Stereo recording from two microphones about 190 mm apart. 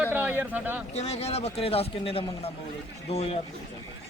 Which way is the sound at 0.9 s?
35° left (ahead or behind).